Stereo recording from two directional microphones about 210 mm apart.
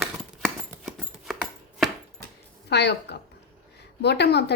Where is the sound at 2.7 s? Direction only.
55° left (ahead or behind).